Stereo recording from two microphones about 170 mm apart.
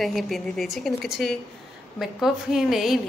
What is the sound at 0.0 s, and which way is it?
A woman's voice, centre (ahead or behind).